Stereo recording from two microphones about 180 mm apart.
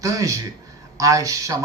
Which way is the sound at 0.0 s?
20° right (ahead or behind).